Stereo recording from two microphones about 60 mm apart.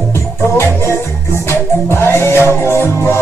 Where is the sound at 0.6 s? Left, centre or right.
Left.